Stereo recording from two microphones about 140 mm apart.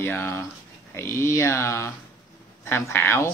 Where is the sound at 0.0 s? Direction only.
15° left (ahead or behind).